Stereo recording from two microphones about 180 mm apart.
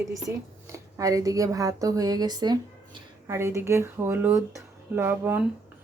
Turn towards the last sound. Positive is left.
turn(degrees=-10)  # may be behind; listen again after turning